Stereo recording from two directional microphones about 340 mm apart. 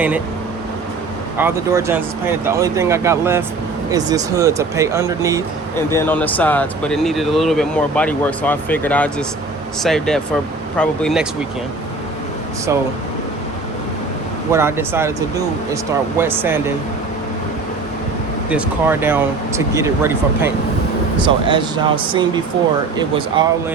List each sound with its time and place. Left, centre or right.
1.4 s speech: centre
5.9 s speech: centre
14.5 s speech: centre
18.4 s speech: centre